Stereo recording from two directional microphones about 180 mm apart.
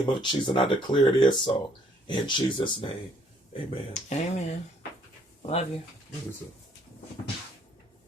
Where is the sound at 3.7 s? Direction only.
40° left (ahead or behind).